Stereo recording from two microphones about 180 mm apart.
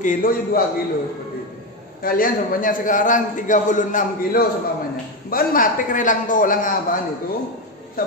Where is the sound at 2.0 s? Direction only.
50° left (ahead or behind).